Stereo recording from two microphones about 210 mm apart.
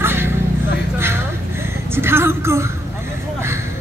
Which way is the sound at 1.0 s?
10° right (ahead or behind).